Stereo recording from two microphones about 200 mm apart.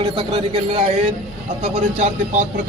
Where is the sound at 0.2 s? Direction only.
30° right (ahead or behind).